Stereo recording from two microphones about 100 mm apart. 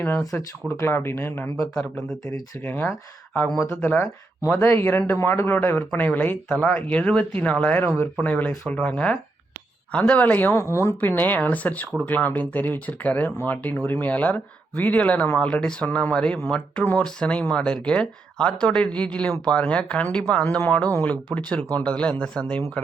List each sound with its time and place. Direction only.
0.8 s speech: 25° left (ahead or behind)
1.7 s speech: 5° left (ahead or behind)
2.6 s speech: 20° left (ahead or behind)